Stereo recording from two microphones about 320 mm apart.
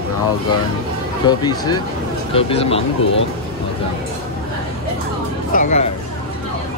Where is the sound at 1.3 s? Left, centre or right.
Centre.